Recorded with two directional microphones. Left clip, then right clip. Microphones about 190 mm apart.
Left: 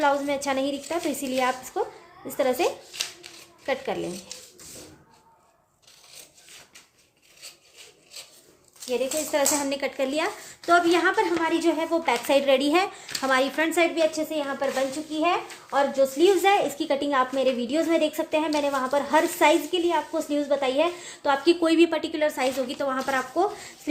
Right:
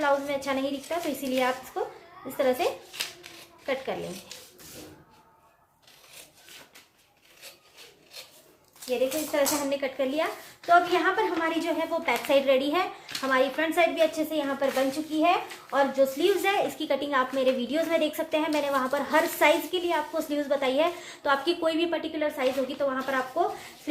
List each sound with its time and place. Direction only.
0.0 s a woman's voice: 45° left (ahead or behind)
4.3 s speech: 5° left (ahead or behind)
8.9 s a woman's voice: 50° left (ahead or behind)
14.1 s a woman's voice: 30° left (ahead or behind); by 23.2 s 50° left (ahead or behind)